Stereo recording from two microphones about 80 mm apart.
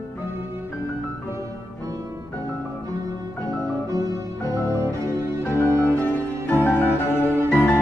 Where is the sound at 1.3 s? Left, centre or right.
Right.